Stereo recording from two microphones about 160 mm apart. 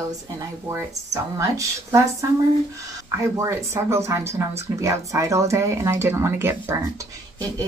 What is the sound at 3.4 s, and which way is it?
Speech, 15° right (ahead or behind).